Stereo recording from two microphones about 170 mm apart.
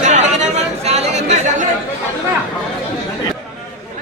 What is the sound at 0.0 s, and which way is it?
Chatter, 45° right (ahead or behind).